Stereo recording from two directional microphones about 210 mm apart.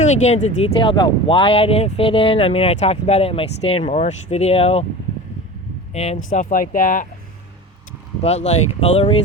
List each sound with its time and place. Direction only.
0.0 s speech: 35° left (ahead or behind)
5.9 s speech: 30° left (ahead or behind)
8.2 s speech: 30° left (ahead or behind)